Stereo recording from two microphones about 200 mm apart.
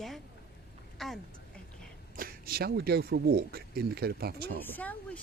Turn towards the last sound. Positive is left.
turn(degrees=5)  # may be behind; listen again after turning